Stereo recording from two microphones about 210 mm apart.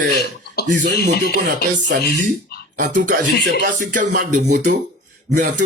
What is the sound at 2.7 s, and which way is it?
Speech, 40° right (ahead or behind).